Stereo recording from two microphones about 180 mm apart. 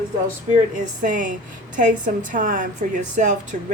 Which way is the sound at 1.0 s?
45° right (ahead or behind).